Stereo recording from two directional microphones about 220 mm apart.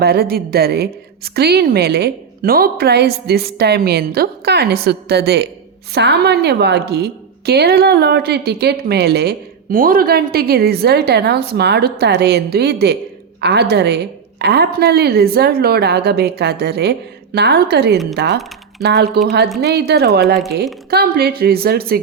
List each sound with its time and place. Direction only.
0.0 s a woman's voice: 45° right (ahead or behind)
17.9 s speech: centre (ahead or behind)
18.8 s a woman's voice: 50° right (ahead or behind)